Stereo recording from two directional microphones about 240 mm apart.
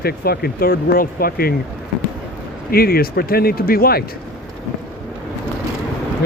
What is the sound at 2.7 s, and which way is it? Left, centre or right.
Speech, left.